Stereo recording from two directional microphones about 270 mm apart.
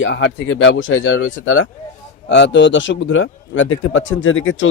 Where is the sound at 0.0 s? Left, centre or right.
Left.